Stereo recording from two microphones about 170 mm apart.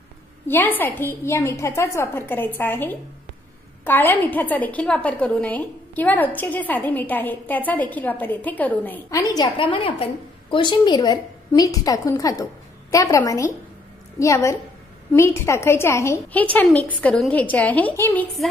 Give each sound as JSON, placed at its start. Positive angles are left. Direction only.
{"t": 0.5, "sound": "a woman's voice", "side_deg": 10}